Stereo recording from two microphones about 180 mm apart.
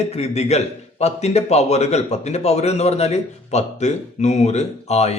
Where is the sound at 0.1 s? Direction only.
40° left (ahead or behind).